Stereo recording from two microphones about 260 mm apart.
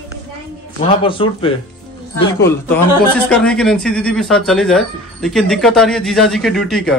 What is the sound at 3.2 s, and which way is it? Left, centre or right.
Speech, centre.